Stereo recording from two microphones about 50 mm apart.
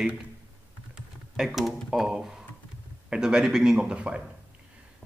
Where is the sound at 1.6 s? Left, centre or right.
Centre.